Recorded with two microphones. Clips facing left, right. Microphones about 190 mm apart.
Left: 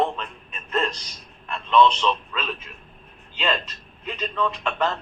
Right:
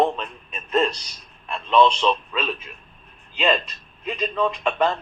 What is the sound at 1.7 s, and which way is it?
Speech, 30° right (ahead or behind).